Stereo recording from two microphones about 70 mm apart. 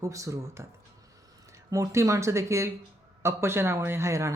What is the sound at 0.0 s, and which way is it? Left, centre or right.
Speech, right.